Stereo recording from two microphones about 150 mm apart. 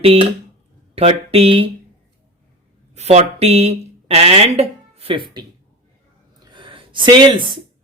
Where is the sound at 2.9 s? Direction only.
45° right (ahead or behind); by 5.5 s 30° right (ahead or behind).